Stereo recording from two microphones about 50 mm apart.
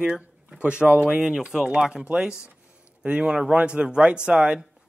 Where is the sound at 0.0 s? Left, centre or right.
Centre.